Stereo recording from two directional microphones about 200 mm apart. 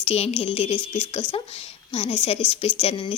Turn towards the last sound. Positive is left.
turn(degrees=30)  # may be behind; listen again after turning